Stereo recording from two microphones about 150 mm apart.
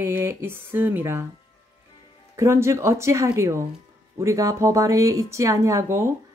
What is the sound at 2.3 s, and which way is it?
Speech, 20° right (ahead or behind).